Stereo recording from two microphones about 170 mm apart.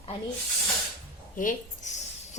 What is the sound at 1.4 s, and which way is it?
Speech, 50° left (ahead or behind).